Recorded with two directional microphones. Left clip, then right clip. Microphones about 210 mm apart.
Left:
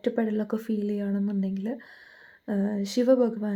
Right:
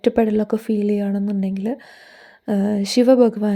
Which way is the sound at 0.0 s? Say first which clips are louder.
Right 10 dB; 35° right (ahead or behind).